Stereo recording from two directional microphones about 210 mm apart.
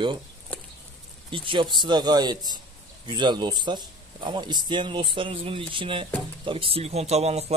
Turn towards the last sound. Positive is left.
turn(degrees=-30)  # may be behind; listen again after turning